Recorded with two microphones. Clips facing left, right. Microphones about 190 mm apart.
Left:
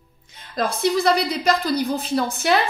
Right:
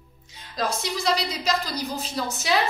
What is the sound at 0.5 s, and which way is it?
A woman's voice, 55° left (ahead or behind).